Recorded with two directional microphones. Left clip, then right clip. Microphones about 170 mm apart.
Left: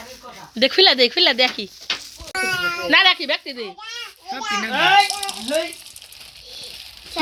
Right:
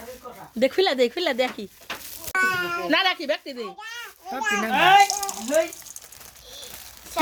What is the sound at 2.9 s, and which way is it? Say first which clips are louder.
Speech: left 8 dB; 5° right (ahead or behind).